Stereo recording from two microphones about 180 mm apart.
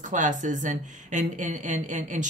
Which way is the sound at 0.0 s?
45° right (ahead or behind).